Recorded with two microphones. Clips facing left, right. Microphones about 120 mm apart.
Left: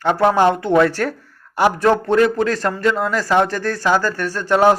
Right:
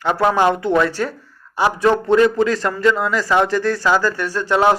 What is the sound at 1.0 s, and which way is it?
Speech, 60° left (ahead or behind).